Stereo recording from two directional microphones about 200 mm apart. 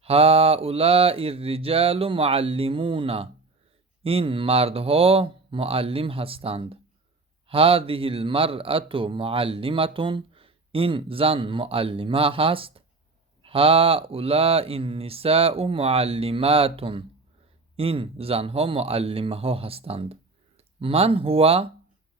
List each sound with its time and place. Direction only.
0.0 s speech: 30° right (ahead or behind)